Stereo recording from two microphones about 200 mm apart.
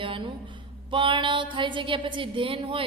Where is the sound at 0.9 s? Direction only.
25° right (ahead or behind).